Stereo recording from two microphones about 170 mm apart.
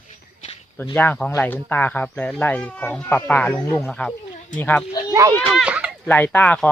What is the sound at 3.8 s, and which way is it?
Speech, 5° left (ahead or behind).